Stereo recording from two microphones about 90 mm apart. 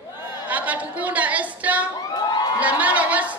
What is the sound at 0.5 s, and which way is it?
A woman's voice, 15° right (ahead or behind).